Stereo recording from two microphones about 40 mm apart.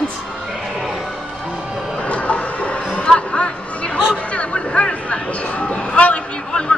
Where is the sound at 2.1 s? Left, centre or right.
Left.